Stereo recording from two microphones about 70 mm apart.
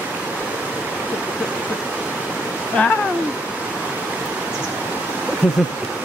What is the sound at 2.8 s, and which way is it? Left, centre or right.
Speech, centre.